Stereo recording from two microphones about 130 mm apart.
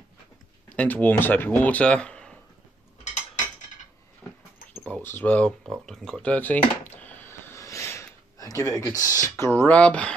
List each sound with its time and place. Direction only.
0.7 s speech: 10° left (ahead or behind)
4.2 s dog: centre (ahead or behind)
4.8 s speech: 15° left (ahead or behind)
9.5 s speech: 10° left (ahead or behind)